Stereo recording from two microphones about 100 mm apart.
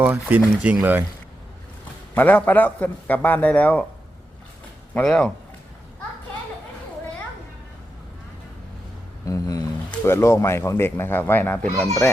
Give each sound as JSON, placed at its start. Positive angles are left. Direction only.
{"t": 0.0, "sound": "speech", "side_deg": -15}
{"t": 2.1, "sound": "a man's voice", "side_deg": 15}
{"t": 5.0, "sound": "a man's voice", "side_deg": 10}
{"t": 9.2, "sound": "a sound", "side_deg": 35}
{"t": 10.0, "sound": "speech", "side_deg": 25}